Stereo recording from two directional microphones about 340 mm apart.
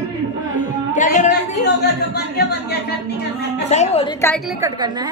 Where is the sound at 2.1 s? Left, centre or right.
Left.